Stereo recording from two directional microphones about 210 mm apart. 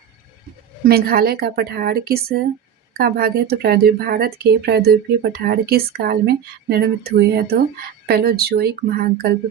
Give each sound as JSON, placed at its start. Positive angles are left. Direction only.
{"t": 0.9, "sound": "speech", "side_deg": -45}